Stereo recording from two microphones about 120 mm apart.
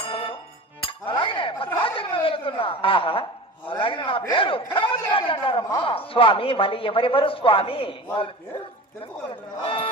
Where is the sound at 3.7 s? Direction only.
45° left (ahead or behind).